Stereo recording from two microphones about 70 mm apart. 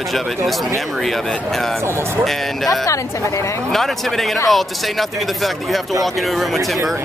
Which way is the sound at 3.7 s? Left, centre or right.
Centre.